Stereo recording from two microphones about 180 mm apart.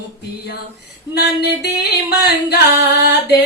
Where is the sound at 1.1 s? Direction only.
65° left (ahead or behind).